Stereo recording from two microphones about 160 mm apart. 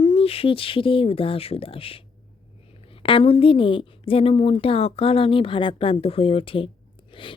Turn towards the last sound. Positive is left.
turn(degrees=30)  # may be behind; listen again after turning